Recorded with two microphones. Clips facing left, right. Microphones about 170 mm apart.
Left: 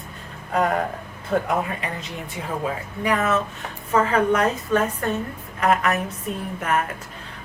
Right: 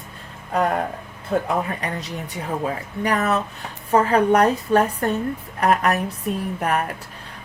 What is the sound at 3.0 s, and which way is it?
A woman's voice, 40° right (ahead or behind).